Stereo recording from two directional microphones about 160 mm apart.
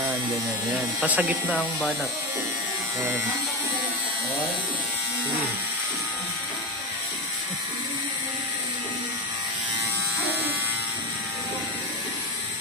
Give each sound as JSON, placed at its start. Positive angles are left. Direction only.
{"t": 1.0, "sound": "speech", "side_deg": -10}